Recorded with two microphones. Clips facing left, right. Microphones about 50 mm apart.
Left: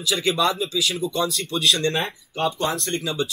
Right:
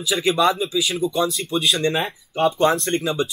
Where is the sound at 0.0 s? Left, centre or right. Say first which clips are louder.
Right 3 dB; centre.